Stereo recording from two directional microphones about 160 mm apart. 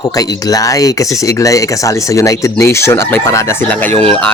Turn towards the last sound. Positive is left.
turn(degrees=10)  # may be behind; listen again after turning